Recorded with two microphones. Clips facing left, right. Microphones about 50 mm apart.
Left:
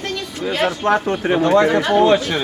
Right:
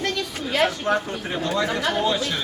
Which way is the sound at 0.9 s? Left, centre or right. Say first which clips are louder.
Left 7 dB; left.